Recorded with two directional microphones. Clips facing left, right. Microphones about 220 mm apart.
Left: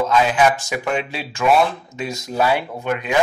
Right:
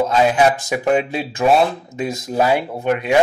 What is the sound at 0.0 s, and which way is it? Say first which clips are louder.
Speech: right 2 dB; 35° right (ahead or behind).